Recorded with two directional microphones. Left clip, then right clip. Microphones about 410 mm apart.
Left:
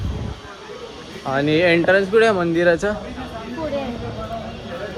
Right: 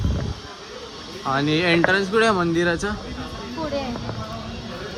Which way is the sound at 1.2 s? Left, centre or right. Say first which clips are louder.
Left 3 dB; centre.